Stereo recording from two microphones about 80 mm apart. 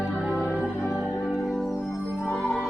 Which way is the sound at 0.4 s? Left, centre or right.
Centre.